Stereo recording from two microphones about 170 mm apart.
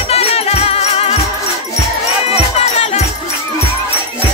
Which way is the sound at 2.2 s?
40° left (ahead or behind).